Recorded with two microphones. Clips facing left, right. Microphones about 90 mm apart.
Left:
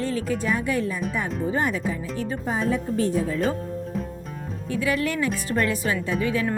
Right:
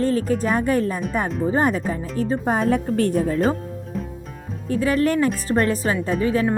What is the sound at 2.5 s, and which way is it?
Speech, 60° right (ahead or behind).